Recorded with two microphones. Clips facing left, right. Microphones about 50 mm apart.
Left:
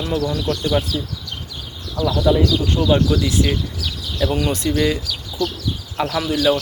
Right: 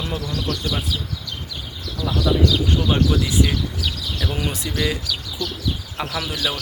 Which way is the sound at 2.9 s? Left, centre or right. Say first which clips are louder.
Left 5 dB; centre.